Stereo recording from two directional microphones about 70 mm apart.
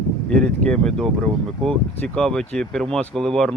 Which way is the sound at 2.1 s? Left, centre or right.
Centre.